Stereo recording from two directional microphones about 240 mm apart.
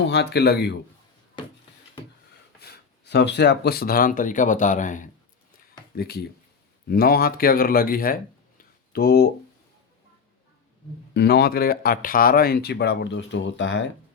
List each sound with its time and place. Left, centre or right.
0.0 s speech: left
2.6 s speech: left
11.1 s speech: left